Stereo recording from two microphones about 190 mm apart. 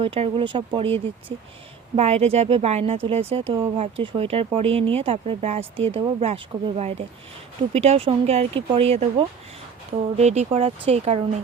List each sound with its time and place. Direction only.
0.0 s speech: 30° right (ahead or behind)